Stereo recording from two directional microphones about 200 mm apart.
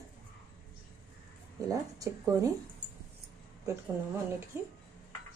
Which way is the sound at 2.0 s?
15° right (ahead or behind).